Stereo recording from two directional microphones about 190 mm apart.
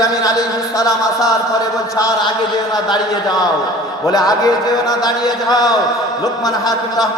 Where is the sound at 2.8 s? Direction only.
20° left (ahead or behind).